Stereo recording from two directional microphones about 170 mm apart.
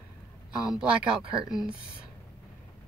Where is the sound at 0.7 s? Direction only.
5° right (ahead or behind).